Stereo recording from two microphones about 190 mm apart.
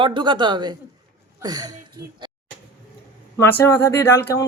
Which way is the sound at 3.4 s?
15° left (ahead or behind).